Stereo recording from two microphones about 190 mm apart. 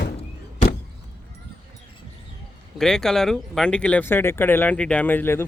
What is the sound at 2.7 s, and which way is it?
Speech, 5° left (ahead or behind).